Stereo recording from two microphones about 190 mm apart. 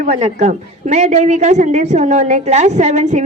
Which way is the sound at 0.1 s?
30° right (ahead or behind).